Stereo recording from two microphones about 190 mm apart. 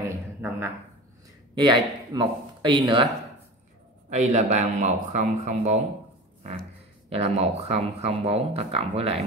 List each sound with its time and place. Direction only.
0.0 s a sound: 10° right (ahead or behind)
1.5 s speech: 25° right (ahead or behind)
4.1 s speech: 40° right (ahead or behind)
7.1 s speech: 35° right (ahead or behind)